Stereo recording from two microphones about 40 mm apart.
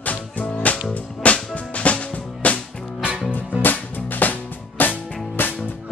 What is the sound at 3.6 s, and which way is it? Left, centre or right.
Music, left.